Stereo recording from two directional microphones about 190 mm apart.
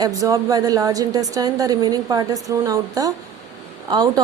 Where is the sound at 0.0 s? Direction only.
20° right (ahead or behind).